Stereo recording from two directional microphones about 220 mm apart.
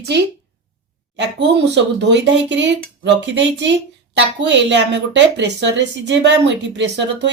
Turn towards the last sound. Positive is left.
turn(degrees=-50)  # may be behind; listen again after turning